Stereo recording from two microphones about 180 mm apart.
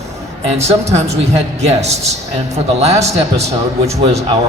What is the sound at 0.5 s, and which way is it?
A man's voice, 35° right (ahead or behind).